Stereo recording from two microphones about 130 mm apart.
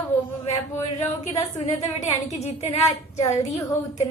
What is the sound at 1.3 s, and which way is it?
Speech, 55° left (ahead or behind).